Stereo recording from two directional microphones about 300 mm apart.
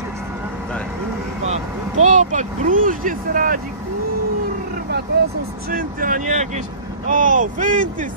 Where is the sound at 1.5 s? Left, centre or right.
Right.